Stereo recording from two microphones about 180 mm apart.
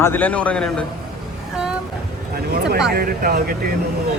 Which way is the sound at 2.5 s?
60° right (ahead or behind).